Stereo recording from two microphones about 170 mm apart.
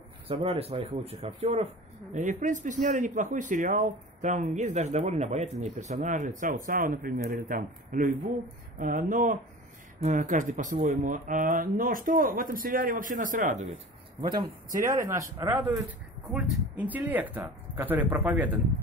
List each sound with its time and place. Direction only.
0.3 s speech: 35° right (ahead or behind); by 13.7 s 50° right (ahead or behind)
14.7 s speech: 55° right (ahead or behind)
15.0 s speech: 20° right (ahead or behind)